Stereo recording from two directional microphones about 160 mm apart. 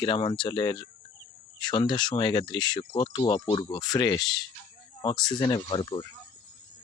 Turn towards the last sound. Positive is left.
turn(degrees=30)  # may be behind; listen again after turning